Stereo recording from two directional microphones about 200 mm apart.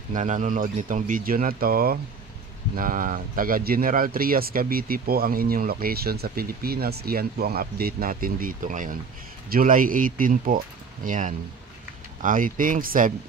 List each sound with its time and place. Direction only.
0.1 s speech: 40° right (ahead or behind)